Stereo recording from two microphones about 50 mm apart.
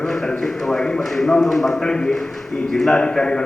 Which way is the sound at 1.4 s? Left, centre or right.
Centre.